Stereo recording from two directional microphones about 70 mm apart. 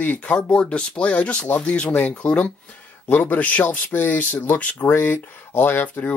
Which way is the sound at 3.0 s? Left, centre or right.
Left.